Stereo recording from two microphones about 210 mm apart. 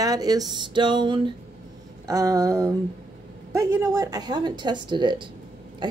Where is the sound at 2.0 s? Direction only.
15° right (ahead or behind).